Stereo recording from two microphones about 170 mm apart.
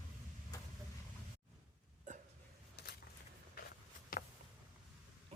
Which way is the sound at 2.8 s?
75° left (ahead or behind).